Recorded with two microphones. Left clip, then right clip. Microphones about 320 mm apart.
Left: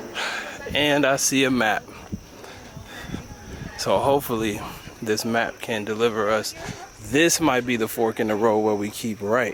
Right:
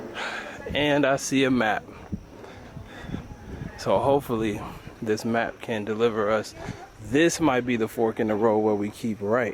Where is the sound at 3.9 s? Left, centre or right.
Centre.